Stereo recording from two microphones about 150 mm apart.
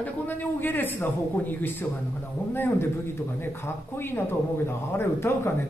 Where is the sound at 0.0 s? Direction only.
10° left (ahead or behind).